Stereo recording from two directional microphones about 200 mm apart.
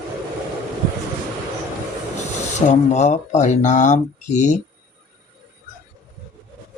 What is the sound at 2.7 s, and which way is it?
Speech, 35° left (ahead or behind).